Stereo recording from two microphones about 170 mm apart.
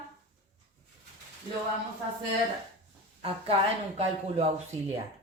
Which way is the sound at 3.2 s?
35° right (ahead or behind).